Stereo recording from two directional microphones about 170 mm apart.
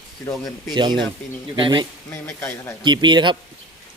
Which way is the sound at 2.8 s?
25° right (ahead or behind).